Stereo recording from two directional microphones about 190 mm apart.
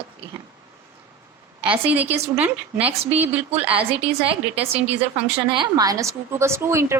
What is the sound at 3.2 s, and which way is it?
Speech, 10° right (ahead or behind).